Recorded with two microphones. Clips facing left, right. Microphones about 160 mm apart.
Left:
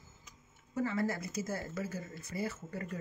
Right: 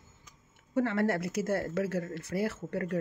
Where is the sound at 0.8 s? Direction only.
75° right (ahead or behind).